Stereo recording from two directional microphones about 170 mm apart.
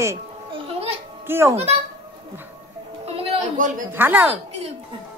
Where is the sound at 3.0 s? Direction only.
35° right (ahead or behind).